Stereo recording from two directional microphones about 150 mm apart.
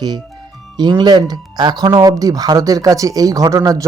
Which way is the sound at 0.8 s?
30° right (ahead or behind).